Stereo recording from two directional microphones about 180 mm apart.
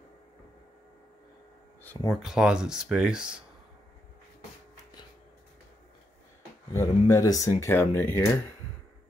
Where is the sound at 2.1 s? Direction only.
5° right (ahead or behind).